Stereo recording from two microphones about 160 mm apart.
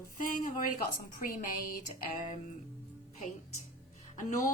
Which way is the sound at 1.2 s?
65° left (ahead or behind).